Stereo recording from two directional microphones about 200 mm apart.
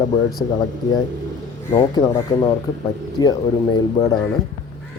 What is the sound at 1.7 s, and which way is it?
A man's voice, 15° left (ahead or behind).